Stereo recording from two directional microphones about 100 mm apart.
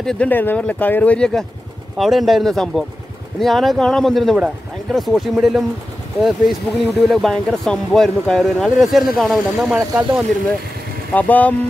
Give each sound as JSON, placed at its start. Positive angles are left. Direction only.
{"t": 0.0, "sound": "speech", "side_deg": 5}
{"t": 0.3, "sound": "speech", "side_deg": 20}
{"t": 2.0, "sound": "speech", "side_deg": 0}
{"t": 9.8, "sound": "speech", "side_deg": -15}
{"t": 11.1, "sound": "speech", "side_deg": 15}